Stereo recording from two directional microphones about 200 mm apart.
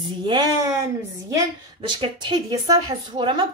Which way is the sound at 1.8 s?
25° right (ahead or behind).